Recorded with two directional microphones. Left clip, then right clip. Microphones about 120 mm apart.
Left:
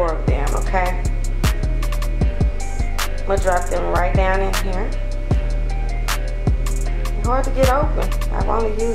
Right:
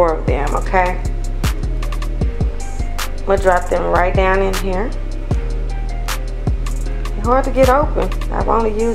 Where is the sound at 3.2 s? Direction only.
30° right (ahead or behind).